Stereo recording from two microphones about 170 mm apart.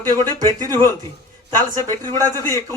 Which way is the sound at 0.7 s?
15° left (ahead or behind).